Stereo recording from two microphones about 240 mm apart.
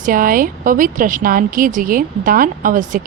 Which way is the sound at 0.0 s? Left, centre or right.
Right.